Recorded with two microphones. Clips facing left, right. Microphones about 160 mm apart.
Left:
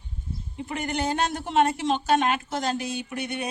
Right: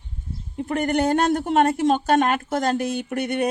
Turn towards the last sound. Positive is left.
turn(degrees=-55)  # may be behind; listen again after turning